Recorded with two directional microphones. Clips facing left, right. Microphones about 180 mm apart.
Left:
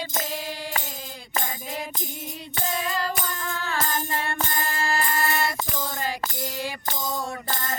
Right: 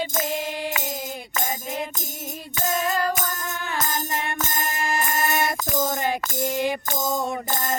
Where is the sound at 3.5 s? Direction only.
20° right (ahead or behind).